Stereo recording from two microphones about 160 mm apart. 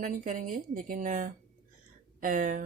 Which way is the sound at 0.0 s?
55° right (ahead or behind).